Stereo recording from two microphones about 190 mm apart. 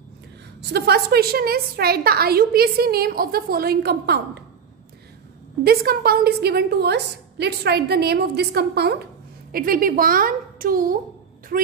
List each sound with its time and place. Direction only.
0.6 s a woman's voice: 60° right (ahead or behind)
5.6 s a woman's voice: 55° right (ahead or behind)